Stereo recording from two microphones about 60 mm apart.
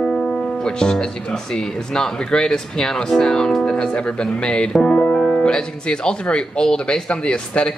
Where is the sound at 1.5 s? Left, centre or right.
Centre.